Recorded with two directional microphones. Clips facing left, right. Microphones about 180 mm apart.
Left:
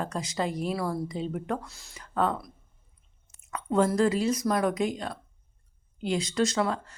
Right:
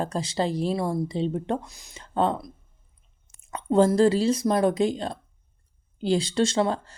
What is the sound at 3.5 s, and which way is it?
Speech, 30° right (ahead or behind).